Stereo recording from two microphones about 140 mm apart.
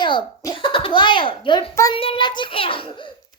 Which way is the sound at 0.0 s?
35° left (ahead or behind).